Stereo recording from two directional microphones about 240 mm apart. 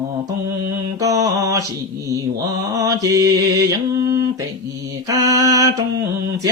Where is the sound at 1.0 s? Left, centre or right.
Centre.